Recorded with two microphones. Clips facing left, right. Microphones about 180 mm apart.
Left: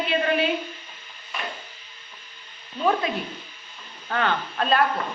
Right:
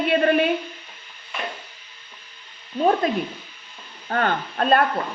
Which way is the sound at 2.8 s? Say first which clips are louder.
Right 4 dB; 40° right (ahead or behind).